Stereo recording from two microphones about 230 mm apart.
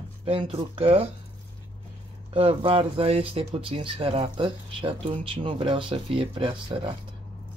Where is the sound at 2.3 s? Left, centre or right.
Right.